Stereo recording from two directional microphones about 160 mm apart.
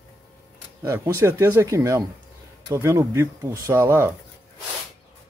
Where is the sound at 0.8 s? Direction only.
15° right (ahead or behind).